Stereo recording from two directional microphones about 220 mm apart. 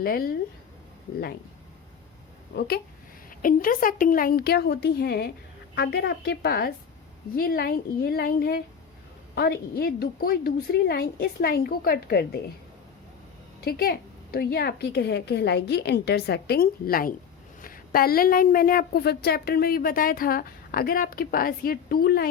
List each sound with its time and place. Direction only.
0.0 s a woman's voice: 40° left (ahead or behind)
2.6 s a woman's voice: 45° left (ahead or behind)
13.6 s a woman's voice: 45° left (ahead or behind)